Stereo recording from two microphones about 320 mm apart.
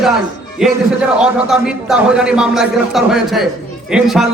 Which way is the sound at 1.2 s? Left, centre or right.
Centre.